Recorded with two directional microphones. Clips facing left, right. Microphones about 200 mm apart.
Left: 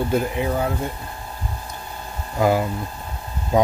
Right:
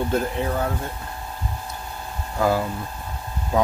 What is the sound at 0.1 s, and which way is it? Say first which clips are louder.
Speech: left 2 dB; 10° left (ahead or behind).